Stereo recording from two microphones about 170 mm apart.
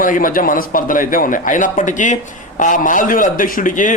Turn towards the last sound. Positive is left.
turn(degrees=50)  # may be behind; listen again after turning